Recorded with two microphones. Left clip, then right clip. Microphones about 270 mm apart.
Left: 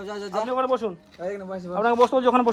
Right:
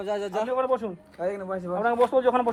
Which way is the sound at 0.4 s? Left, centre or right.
Left.